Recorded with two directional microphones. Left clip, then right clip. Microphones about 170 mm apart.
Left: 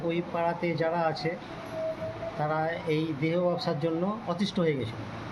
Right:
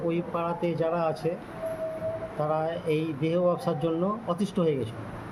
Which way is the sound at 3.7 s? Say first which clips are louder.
Right 2 dB; 15° right (ahead or behind).